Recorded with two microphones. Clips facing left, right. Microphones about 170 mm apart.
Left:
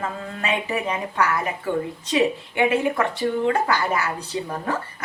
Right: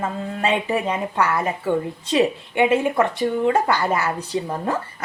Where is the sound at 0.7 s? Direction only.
25° right (ahead or behind).